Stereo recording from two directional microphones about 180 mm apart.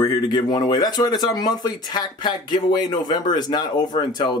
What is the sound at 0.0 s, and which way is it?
Speech, 20° left (ahead or behind).